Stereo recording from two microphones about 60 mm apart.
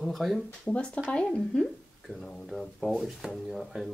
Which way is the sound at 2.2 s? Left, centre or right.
Centre.